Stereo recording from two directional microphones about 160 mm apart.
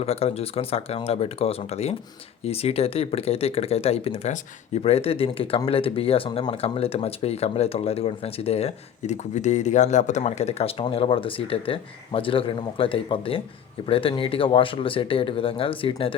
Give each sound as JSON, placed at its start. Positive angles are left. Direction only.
{"t": 0.0, "sound": "speech", "side_deg": 40}